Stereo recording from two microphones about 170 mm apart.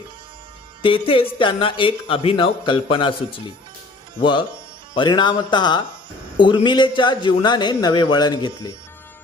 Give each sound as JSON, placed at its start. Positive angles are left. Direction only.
{"t": 0.8, "sound": "a man's voice", "side_deg": 30}